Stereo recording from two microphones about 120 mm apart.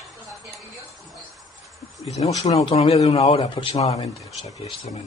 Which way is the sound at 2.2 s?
55° left (ahead or behind).